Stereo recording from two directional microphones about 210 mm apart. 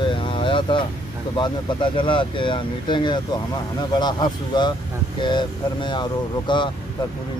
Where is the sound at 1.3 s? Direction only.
20° left (ahead or behind).